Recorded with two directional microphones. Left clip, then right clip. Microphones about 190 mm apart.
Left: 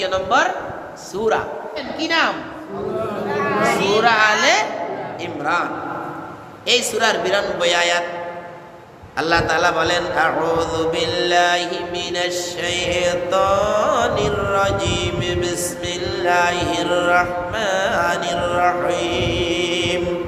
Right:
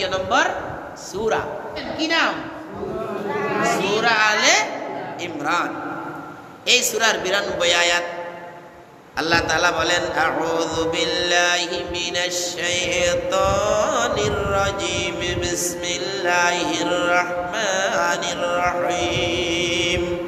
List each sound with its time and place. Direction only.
0.0 s mantra: 15° left (ahead or behind)
2.0 s a woman's voice: 25° left (ahead or behind)
3.6 s mantra: 20° left (ahead or behind)
5.4 s a man's voice: centre (ahead or behind)
6.7 s a man's voice: 5° left (ahead or behind)
9.1 s mantra: 5° left (ahead or behind)